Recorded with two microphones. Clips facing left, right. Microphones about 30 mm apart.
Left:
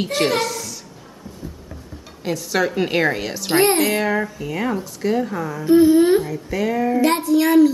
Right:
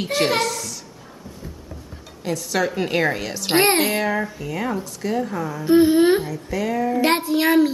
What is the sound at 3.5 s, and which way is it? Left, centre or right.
Speech, right.